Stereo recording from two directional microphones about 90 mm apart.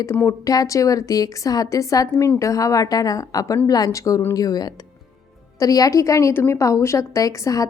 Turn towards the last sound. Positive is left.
turn(degrees=40)  # may be behind; listen again after turning